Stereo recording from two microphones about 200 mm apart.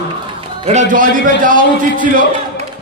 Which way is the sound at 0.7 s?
40° right (ahead or behind).